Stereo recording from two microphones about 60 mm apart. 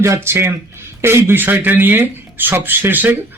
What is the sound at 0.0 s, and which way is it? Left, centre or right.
A man's voice, right.